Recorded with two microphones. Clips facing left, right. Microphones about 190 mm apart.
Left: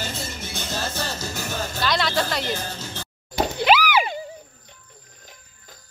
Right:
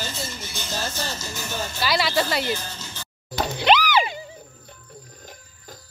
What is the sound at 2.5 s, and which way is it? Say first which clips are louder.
Music: left 4 dB; 50° left (ahead or behind).